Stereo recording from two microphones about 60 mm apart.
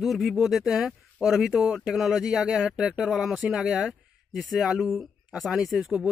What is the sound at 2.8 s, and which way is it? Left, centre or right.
Speech, centre.